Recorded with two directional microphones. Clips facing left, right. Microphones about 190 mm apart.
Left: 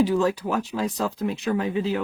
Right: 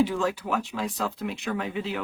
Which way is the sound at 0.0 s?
40° left (ahead or behind).